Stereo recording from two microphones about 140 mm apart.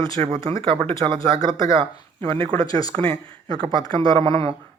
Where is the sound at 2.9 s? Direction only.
40° right (ahead or behind).